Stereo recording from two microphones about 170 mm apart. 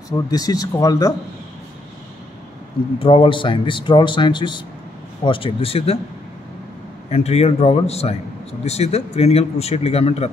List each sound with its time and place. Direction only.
0.1 s speech: 20° left (ahead or behind)
3.0 s a man's voice: 30° left (ahead or behind)
7.1 s a man's voice: 40° left (ahead or behind)